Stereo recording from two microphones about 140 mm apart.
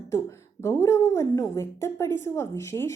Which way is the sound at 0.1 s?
20° left (ahead or behind).